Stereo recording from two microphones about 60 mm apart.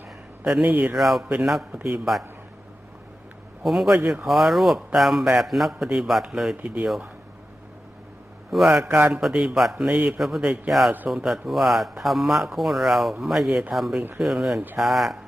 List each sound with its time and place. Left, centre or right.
0.6 s speech: centre
0.9 s speech: centre
3.6 s speech: centre
6.6 s speech: right
6.8 s speech: centre
8.6 s speech: centre
9.0 s a man's voice: right
9.3 s speech: centre